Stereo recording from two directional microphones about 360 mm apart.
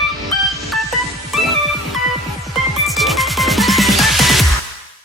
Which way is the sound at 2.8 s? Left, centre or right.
Centre.